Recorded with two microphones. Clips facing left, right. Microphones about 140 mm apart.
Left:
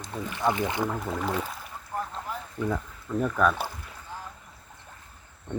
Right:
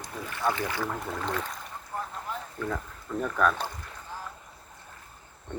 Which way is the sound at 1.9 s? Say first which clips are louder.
Left 3 dB; centre (ahead or behind).